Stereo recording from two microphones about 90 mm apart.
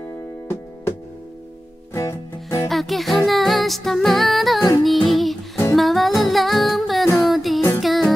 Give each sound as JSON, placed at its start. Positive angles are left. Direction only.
{"t": 2.0, "sound": "music", "side_deg": 35}
{"t": 2.7, "sound": "music", "side_deg": 0}
{"t": 4.8, "sound": "child singing", "side_deg": 0}
{"t": 5.8, "sound": "music", "side_deg": 0}